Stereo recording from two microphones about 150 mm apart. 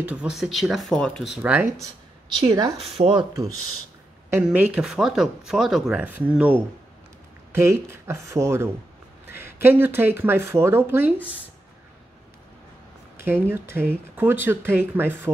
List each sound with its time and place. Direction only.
0.0 s speech: 10° right (ahead or behind)
1.4 s speech: 15° right (ahead or behind)
2.3 s speech: 25° right (ahead or behind)
2.8 s speech: 40° right (ahead or behind)
4.5 s speech: 10° right (ahead or behind)
13.2 s speech: 15° right (ahead or behind)